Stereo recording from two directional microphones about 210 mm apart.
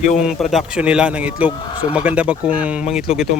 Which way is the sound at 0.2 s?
5° right (ahead or behind).